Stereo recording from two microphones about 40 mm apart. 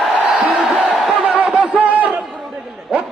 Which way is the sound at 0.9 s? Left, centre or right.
Centre.